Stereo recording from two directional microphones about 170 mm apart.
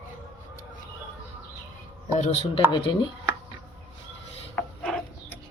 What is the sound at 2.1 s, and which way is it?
Speech, 40° left (ahead or behind).